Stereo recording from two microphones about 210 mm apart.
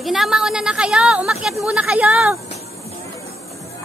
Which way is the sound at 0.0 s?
Centre (ahead or behind).